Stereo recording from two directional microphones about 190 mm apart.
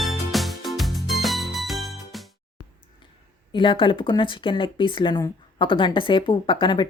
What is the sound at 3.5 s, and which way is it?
Speech, 25° left (ahead or behind).